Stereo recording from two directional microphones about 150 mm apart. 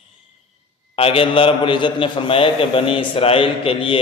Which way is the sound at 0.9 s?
40° left (ahead or behind).